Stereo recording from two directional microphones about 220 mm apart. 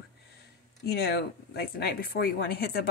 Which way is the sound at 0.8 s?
45° left (ahead or behind).